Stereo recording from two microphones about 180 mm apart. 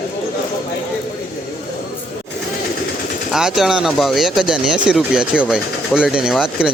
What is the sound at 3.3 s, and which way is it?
Speech, centre (ahead or behind).